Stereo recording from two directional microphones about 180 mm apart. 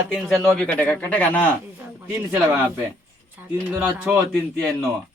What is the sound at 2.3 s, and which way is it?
Speech, 15° right (ahead or behind).